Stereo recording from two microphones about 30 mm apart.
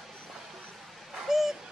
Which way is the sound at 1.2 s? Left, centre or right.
Centre.